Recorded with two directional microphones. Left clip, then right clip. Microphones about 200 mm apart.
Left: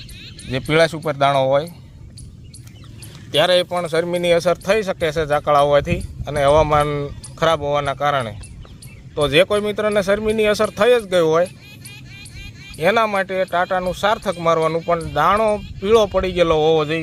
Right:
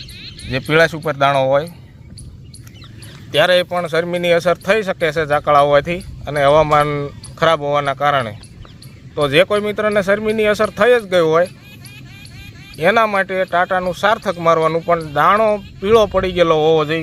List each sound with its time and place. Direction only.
0.2 s a sound: 50° left (ahead or behind)
0.5 s speech: centre (ahead or behind)
3.3 s speech: centre (ahead or behind)
12.7 s speech: 10° right (ahead or behind)